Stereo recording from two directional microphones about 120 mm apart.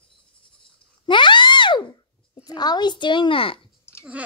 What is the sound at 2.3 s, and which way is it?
Speech, 35° left (ahead or behind).